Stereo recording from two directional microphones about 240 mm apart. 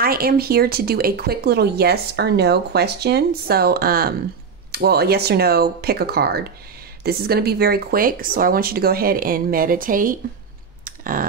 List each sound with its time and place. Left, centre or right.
0.0 s speech: right
10.8 s clicking: right